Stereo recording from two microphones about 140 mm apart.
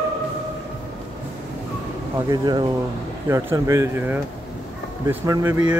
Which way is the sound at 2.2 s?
30° right (ahead or behind).